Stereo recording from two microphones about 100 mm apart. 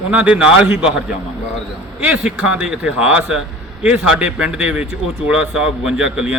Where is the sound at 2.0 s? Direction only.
10° right (ahead or behind).